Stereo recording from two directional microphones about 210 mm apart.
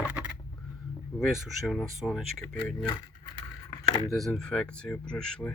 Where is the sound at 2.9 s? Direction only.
20° left (ahead or behind).